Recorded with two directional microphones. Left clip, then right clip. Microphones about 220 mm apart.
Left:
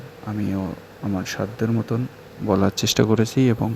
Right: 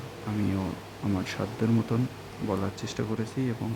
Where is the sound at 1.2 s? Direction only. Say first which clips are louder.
Left 7 dB; 20° left (ahead or behind).